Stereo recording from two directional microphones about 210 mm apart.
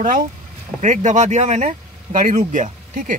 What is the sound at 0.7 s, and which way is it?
Speech, 35° right (ahead or behind).